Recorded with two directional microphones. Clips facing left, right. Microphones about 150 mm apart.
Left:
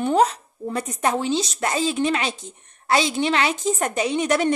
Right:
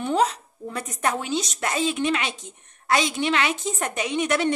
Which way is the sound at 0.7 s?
30° left (ahead or behind).